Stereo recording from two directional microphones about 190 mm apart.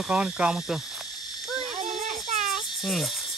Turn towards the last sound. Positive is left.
turn(degrees=0)  # may be behind; listen again after turning